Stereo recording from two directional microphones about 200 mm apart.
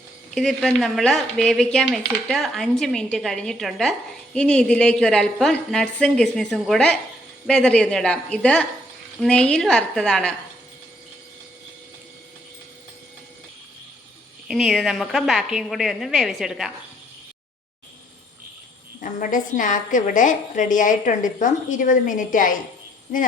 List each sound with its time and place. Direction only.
0.3 s speech: centre (ahead or behind)
14.4 s speech: centre (ahead or behind)
18.9 s a woman's voice: 40° left (ahead or behind)